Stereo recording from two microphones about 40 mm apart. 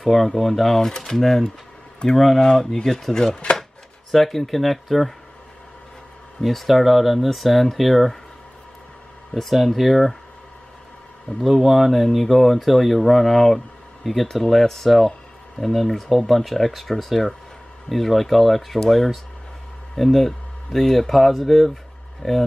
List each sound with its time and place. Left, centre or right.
0.0 s speech: centre
4.1 s speech: centre
6.4 s speech: centre
9.3 s speech: centre
11.4 s speech: centre
14.2 s speech: centre